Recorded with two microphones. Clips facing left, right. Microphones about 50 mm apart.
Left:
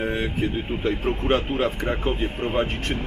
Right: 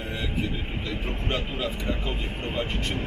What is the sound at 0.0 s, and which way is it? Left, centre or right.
Speech, left.